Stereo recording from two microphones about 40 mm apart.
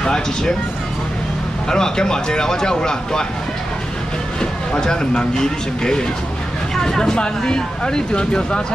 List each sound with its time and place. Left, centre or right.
0.0 s speech: centre
1.7 s speech: centre
4.4 s speech: centre